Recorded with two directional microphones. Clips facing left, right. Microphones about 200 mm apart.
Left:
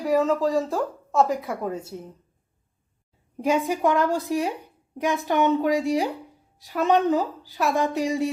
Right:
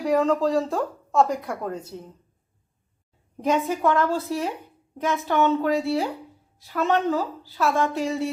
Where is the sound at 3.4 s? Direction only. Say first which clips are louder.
Even; 10° left (ahead or behind).